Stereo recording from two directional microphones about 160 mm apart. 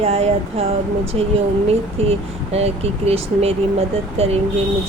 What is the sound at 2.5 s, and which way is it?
Speech, 40° right (ahead or behind).